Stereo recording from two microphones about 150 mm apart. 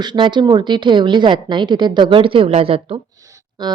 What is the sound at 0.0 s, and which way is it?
A woman's voice, 30° right (ahead or behind).